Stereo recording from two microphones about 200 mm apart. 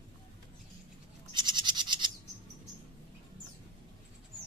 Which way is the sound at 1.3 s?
20° right (ahead or behind).